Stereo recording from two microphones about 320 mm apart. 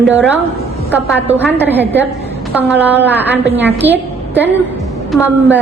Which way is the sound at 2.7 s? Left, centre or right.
Centre.